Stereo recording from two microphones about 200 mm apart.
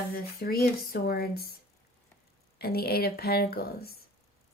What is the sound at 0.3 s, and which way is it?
Speech, 50° left (ahead or behind).